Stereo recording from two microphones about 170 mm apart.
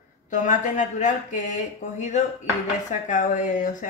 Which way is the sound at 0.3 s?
50° left (ahead or behind).